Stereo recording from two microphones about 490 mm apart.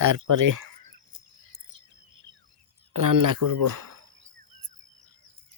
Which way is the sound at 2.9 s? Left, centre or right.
Right.